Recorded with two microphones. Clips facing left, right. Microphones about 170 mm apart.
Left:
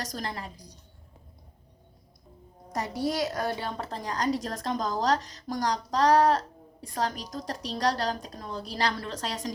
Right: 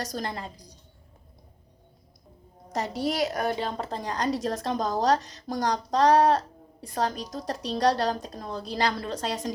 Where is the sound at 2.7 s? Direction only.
25° right (ahead or behind).